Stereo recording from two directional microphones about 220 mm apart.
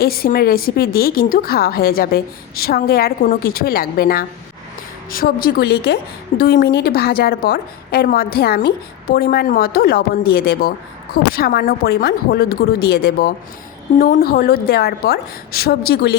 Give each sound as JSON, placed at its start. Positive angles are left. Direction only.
{"t": 0.0, "sound": "a woman's voice", "side_deg": 40}